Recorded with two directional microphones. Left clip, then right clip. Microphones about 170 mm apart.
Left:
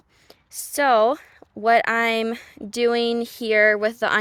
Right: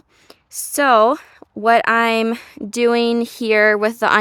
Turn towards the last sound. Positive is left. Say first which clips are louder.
# right 5 dB
turn(degrees=-45)  # may be behind; listen again after turning